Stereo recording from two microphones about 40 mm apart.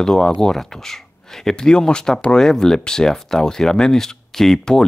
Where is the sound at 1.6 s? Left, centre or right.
Left.